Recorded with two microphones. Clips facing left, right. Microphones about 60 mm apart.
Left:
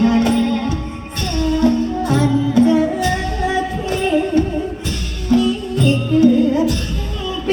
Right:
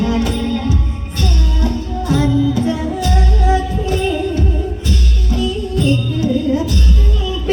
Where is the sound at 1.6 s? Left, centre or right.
Left.